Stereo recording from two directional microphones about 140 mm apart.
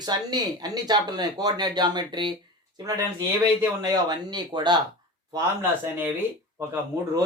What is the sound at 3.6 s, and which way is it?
Speech, 25° right (ahead or behind).